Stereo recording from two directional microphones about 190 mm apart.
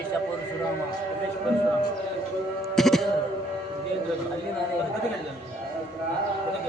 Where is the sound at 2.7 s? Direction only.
Centre (ahead or behind).